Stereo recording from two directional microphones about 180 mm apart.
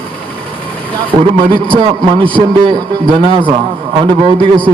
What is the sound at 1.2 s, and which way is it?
Speech, 25° right (ahead or behind).